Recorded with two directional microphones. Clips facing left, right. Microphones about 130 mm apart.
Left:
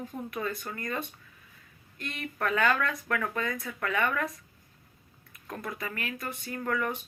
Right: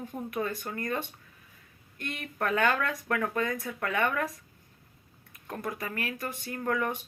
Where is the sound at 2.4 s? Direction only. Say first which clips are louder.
Even; 40° right (ahead or behind).